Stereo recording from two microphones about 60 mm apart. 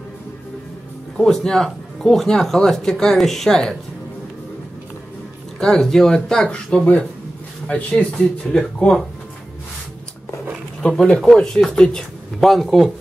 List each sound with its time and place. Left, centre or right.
1.1 s speech: centre
5.6 s speech: centre
10.8 s speech: centre